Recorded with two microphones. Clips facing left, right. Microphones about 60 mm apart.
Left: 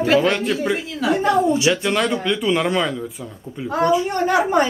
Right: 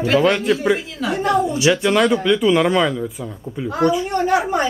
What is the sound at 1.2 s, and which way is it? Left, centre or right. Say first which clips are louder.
Speech: even; left.